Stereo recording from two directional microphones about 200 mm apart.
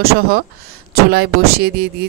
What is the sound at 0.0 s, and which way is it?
A woman's voice, 50° right (ahead or behind).